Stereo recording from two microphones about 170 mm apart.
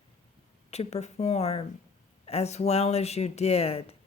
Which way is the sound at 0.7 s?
40° left (ahead or behind).